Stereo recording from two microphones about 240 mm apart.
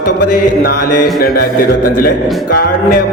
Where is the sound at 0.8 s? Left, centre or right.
Left.